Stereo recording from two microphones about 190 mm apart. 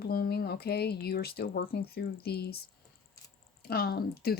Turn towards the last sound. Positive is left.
turn(degrees=55)  # may be behind; listen again after turning